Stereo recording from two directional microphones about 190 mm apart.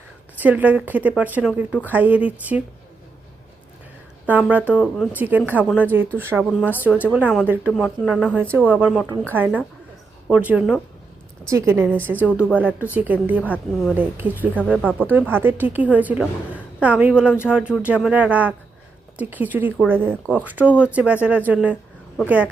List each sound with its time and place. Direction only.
0.3 s a woman's voice: 10° right (ahead or behind)
4.3 s a woman's voice: 5° right (ahead or behind)
13.4 s a woman's voice: 10° left (ahead or behind)
13.9 s a woman's voice: 10° right (ahead or behind)
14.5 s speech: 5° left (ahead or behind)
14.9 s a woman's voice: 10° right (ahead or behind)